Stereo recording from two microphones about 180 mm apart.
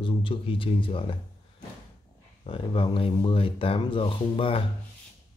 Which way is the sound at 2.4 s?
30° left (ahead or behind).